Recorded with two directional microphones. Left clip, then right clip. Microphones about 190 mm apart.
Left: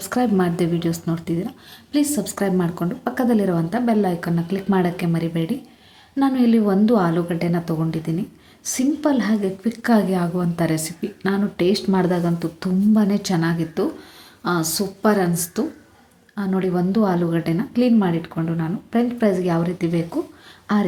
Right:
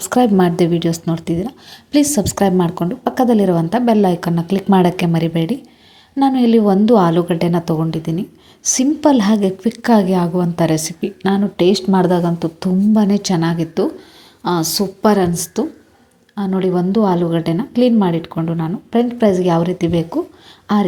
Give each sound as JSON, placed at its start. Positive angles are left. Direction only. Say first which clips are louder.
{"t": 0.0, "sound": "speech", "louder": "right 7 dB", "side_deg": -25}